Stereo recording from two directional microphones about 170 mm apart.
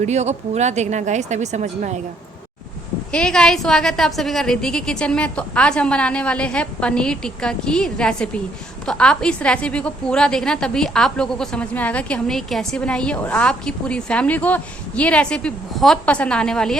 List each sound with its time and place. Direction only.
0.0 s speech: 40° right (ahead or behind)
3.1 s a woman's voice: 5° left (ahead or behind)